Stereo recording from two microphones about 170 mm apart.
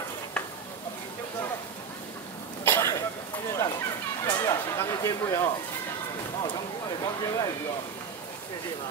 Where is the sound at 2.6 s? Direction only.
15° left (ahead or behind).